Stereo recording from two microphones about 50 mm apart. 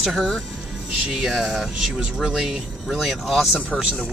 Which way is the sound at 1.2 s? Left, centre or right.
Centre.